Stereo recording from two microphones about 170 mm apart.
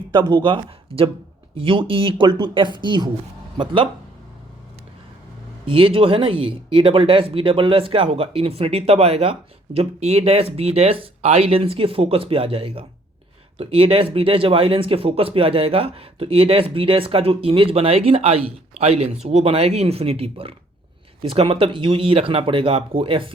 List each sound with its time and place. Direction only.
0.1 s speech: 25° right (ahead or behind)
5.6 s speech: 30° right (ahead or behind)